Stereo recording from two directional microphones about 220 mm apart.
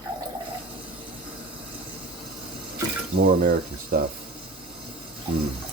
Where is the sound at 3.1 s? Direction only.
40° right (ahead or behind).